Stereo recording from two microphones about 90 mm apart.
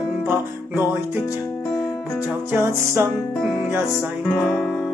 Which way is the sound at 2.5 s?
25° right (ahead or behind).